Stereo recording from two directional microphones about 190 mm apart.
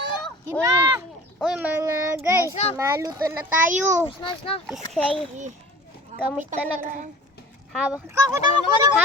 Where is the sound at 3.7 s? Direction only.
40° right (ahead or behind).